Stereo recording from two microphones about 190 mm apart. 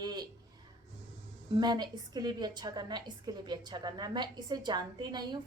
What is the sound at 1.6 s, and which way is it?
A woman's voice, 20° right (ahead or behind).